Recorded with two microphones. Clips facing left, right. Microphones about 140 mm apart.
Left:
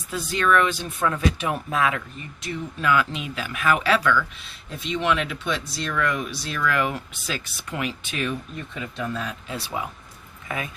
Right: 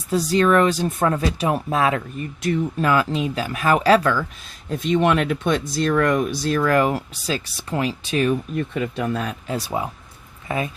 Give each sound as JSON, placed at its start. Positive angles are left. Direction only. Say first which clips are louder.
{"t": 0.1, "sound": "speech", "louder": "right 5 dB", "side_deg": -35}
{"t": 2.4, "sound": "speech", "louder": "right 7 dB", "side_deg": -45}
{"t": 4.7, "sound": "speech", "louder": "right 6 dB", "side_deg": -50}
{"t": 8.5, "sound": "speech", "louder": "right 9 dB", "side_deg": -55}